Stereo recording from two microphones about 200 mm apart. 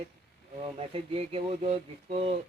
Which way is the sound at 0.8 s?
30° right (ahead or behind).